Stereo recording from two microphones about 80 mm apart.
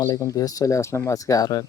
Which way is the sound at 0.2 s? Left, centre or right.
Left.